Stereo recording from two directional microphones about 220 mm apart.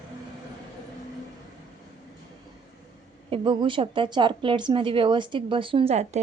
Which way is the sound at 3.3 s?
20° right (ahead or behind).